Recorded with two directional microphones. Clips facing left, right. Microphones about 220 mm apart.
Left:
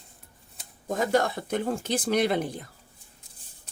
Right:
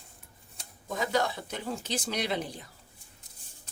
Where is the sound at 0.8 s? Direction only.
50° left (ahead or behind).